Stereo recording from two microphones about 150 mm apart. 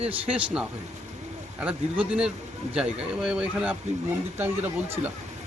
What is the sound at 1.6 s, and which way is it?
Speech, 5° right (ahead or behind).